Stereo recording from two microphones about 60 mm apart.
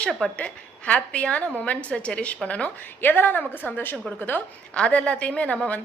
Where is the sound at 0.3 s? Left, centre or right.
Left.